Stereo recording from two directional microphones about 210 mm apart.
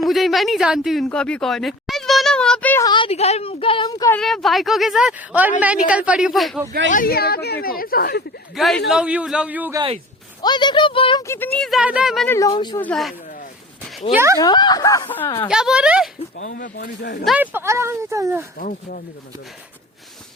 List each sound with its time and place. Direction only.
0.0 s a woman's voice: centre (ahead or behind); by 4.1 s 20° left (ahead or behind)
4.1 s a woman's voice: centre (ahead or behind)
6.9 s a woman's voice: 45° left (ahead or behind)
8.5 s a woman's voice: centre (ahead or behind)
10.4 s speech: 20° left (ahead or behind); by 12.4 s centre (ahead or behind)
12.4 s speech: 20° left (ahead or behind)
12.8 s a woman's voice: 5° left (ahead or behind)
14.3 s speech: 20° left (ahead or behind)
15.4 s a woman's voice: 5° right (ahead or behind)
16.6 s a woman's voice: 55° left (ahead or behind)
17.2 s speech: 5° right (ahead or behind)
18.6 s speech: 40° left (ahead or behind)